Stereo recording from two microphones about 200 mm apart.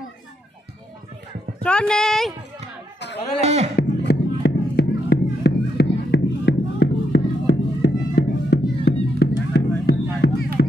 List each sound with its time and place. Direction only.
1.6 s speech: 5° left (ahead or behind)
3.3 s speech: 30° right (ahead or behind)
3.7 s music: 55° left (ahead or behind)